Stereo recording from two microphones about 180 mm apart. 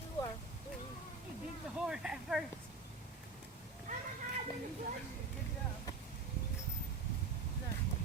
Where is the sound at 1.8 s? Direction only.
5° right (ahead or behind).